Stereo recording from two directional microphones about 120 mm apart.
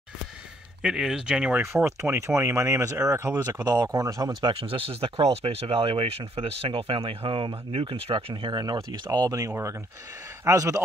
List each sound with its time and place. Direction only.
0.8 s speech: 5° right (ahead or behind)
1.6 s speech: 20° right (ahead or behind)
4.4 s speech: 45° right (ahead or behind); by 10.8 s 25° right (ahead or behind)